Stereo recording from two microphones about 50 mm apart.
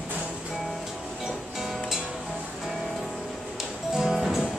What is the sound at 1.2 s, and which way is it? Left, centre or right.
Music, centre.